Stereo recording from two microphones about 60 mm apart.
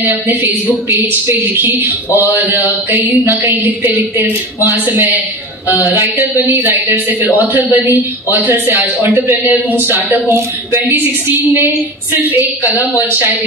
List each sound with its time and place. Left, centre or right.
0.0 s a man's voice: right
2.9 s a sound: right
4.6 s a man's voice: right
7.5 s a man's voice: right
12.2 s a man's voice: right